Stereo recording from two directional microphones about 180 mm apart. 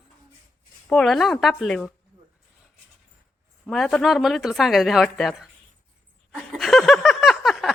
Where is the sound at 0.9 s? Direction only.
5° left (ahead or behind).